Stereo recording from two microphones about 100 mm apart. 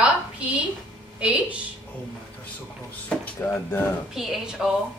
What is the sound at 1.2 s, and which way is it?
Speech, 15° right (ahead or behind).